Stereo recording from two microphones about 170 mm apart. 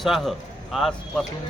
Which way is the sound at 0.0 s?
Centre (ahead or behind).